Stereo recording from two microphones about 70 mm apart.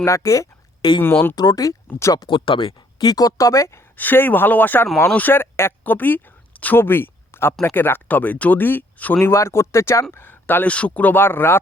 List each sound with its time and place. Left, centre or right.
0.0 s speech: left
1.0 s speech: left
1.4 s speech: left
2.3 s speech: left
3.0 s speech: left
3.9 s speech: left
9.2 s speech: left
10.1 s speech: left